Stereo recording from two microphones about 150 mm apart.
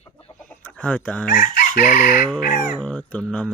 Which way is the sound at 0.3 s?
10° left (ahead or behind).